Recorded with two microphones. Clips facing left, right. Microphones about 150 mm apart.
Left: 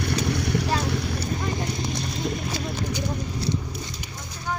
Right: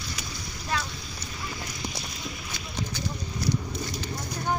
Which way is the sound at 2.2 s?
40° left (ahead or behind).